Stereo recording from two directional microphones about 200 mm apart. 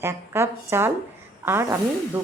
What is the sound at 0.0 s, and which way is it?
A woman's voice, 10° right (ahead or behind).